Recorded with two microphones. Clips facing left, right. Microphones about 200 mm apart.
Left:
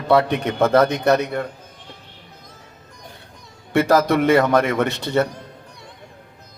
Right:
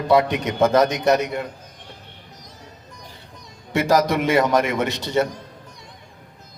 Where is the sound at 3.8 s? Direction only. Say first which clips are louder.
Left 1 dB; 15° right (ahead or behind).